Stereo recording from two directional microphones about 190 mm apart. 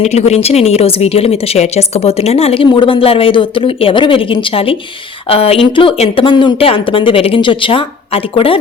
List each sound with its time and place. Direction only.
0.0 s a woman's voice: 35° left (ahead or behind)